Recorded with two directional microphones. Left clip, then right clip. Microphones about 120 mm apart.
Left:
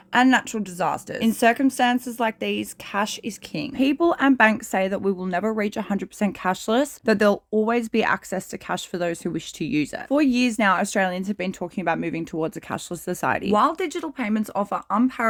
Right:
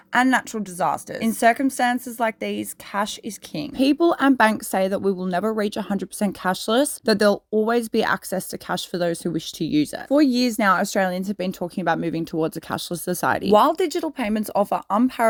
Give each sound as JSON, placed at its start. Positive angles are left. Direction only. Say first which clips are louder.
{"t": 0.1, "sound": "a woman's voice", "louder": "left 1 dB", "side_deg": -25}
{"t": 3.8, "sound": "speech", "louder": "right 2 dB", "side_deg": -55}
{"t": 10.1, "sound": "speech", "louder": "right 2 dB", "side_deg": -30}
{"t": 11.3, "sound": "speech", "louder": "right 2 dB", "side_deg": -60}